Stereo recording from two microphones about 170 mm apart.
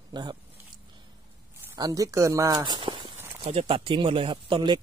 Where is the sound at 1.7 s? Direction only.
20° right (ahead or behind).